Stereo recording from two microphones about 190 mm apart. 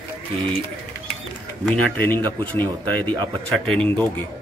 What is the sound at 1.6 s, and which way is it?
Speech, 5° left (ahead or behind).